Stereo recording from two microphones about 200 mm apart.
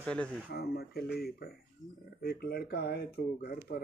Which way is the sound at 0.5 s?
50° left (ahead or behind).